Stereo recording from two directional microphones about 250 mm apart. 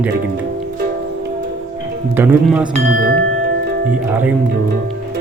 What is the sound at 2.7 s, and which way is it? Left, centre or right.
Speech, right.